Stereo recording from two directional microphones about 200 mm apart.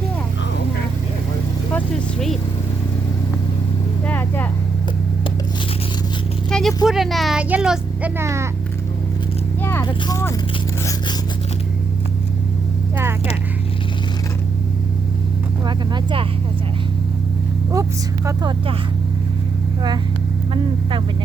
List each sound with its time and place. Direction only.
4.0 s vehicle: 10° left (ahead or behind)
6.5 s a sound: centre (ahead or behind)
6.8 s speech: centre (ahead or behind)
9.6 s vehicle: 10° left (ahead or behind)
9.8 s speech: 15° left (ahead or behind)
15.6 s speech: 20° right (ahead or behind)